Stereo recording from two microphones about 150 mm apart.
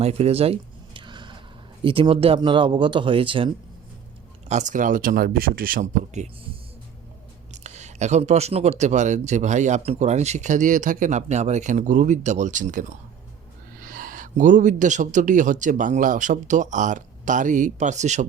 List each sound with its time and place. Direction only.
0.0 s speech: 45° right (ahead or behind)
0.9 s a sound: 30° right (ahead or behind)
1.8 s speech: 35° right (ahead or behind)
4.4 s a man's voice: 55° right (ahead or behind)
7.5 s a man's voice: 50° right (ahead or behind)